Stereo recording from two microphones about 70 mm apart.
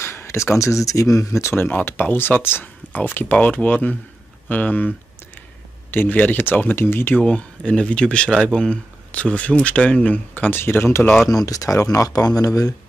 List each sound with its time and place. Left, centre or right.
0.0 s speech: left
7.2 s speech: centre; by 11.1 s left
11.2 s speech: left